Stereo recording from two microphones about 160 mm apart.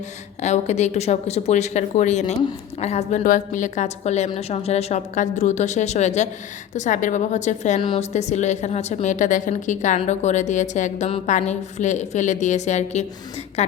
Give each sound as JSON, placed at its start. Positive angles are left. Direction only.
{"t": 0.4, "sound": "a woman's voice", "side_deg": 45}
{"t": 7.8, "sound": "a woman's voice", "side_deg": 30}
{"t": 8.1, "sound": "a woman's voice", "side_deg": 45}